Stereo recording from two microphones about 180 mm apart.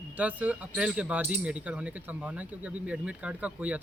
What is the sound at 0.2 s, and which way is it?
Speech, 10° right (ahead or behind).